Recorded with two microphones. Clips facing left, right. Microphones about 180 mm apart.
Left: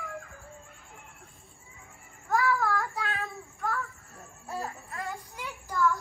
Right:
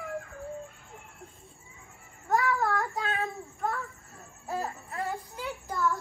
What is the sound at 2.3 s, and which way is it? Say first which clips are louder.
Child singing: even; 20° right (ahead or behind).